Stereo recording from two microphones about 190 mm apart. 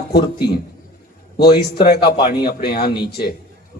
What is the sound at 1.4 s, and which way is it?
A man's voice, 60° left (ahead or behind).